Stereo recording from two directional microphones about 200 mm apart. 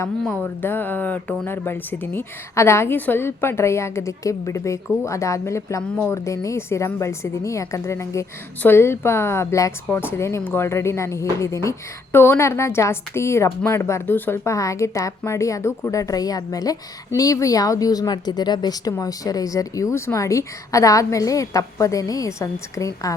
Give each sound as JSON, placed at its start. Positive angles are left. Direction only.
{"t": 0.0, "sound": "speech", "side_deg": 10}